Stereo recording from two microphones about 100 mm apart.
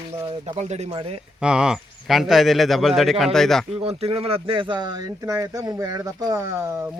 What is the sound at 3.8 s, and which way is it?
Speech, 85° right.